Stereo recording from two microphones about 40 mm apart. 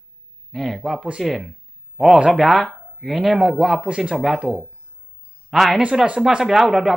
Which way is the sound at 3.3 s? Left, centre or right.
Right.